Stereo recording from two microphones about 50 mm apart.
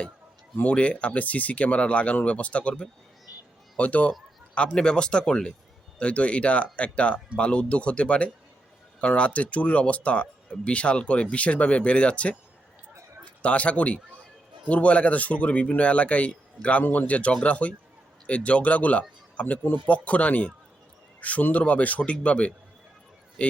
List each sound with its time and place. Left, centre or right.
0.5 s speech: left
13.4 s speech: left